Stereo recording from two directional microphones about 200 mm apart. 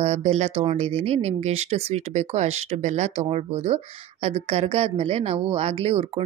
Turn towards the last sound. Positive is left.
turn(degrees=-30)  # may be behind; listen again after turning